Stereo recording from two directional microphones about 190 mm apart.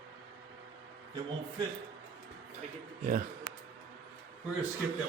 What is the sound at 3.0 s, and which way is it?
Speech, 45° right (ahead or behind).